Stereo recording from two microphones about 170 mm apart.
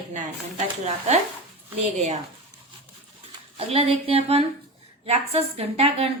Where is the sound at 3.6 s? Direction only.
35° right (ahead or behind).